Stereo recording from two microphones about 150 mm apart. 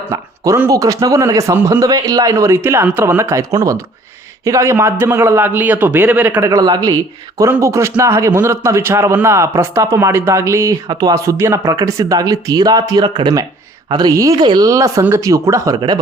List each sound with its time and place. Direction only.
0.1 s a man's voice: 20° right (ahead or behind)